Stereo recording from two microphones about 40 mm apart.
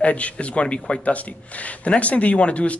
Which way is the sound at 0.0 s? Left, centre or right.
Left.